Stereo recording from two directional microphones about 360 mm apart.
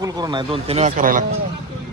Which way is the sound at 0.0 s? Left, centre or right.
Centre.